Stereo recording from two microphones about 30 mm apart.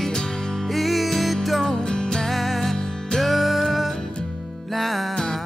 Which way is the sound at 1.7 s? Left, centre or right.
Left.